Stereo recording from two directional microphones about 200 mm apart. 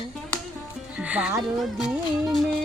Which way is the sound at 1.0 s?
5° right (ahead or behind).